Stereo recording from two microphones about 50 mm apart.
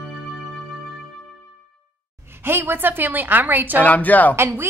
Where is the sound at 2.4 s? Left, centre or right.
Right.